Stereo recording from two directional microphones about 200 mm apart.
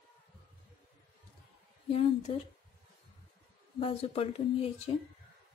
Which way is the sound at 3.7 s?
30° left (ahead or behind).